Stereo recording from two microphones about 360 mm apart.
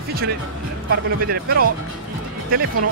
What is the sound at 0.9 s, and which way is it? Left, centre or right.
Speech, right.